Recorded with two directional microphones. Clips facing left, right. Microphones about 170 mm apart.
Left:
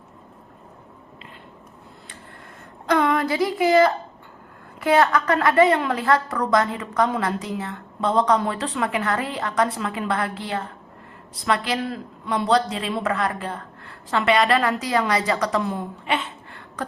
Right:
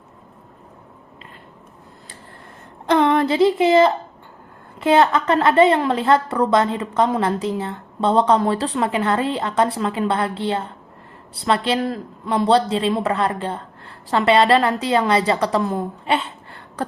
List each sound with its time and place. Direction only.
2.8 s a woman's voice: 30° right (ahead or behind)